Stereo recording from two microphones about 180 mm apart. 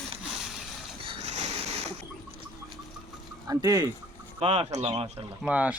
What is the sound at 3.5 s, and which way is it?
Speech, 20° right (ahead or behind).